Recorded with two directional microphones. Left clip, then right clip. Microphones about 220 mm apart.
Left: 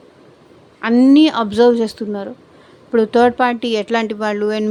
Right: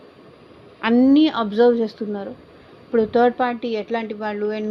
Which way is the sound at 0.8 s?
20° left (ahead or behind).